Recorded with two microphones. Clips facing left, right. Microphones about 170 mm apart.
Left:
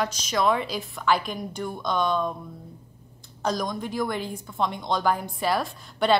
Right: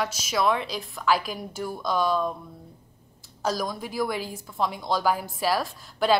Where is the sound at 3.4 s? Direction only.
5° right (ahead or behind).